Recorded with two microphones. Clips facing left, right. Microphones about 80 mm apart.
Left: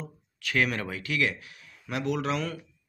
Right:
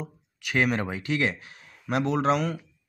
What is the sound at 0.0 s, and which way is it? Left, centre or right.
Speech, centre.